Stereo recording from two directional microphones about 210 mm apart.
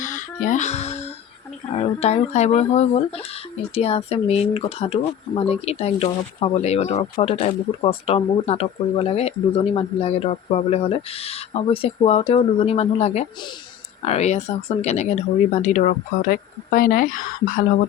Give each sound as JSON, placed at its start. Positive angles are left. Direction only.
{"t": 0.0, "sound": "music", "side_deg": 35}
{"t": 1.8, "sound": "speech", "side_deg": 30}